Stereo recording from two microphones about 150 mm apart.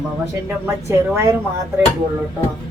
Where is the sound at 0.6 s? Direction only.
15° right (ahead or behind).